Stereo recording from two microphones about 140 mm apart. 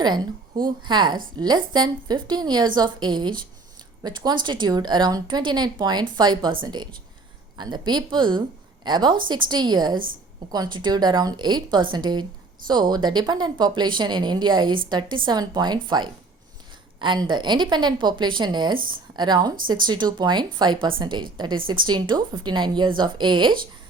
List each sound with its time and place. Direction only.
0.9 s a woman's voice: 35° right (ahead or behind)